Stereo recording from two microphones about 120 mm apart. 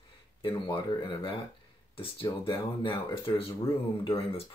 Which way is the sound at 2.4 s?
45° left (ahead or behind).